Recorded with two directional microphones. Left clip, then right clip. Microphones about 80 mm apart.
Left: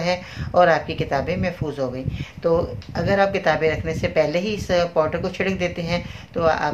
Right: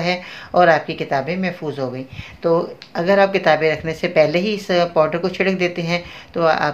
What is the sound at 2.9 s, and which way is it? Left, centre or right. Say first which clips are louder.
Speech: right 5 dB; right.